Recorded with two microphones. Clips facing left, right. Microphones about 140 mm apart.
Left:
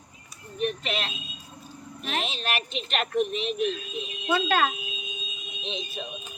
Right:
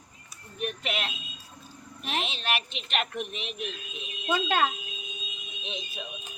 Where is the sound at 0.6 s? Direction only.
10° right (ahead or behind).